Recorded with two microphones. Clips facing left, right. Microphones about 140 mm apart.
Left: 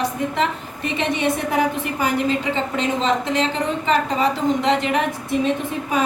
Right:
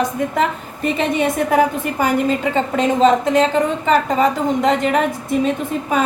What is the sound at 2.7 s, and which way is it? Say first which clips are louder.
A woman's voice: right 8 dB; 45° right (ahead or behind).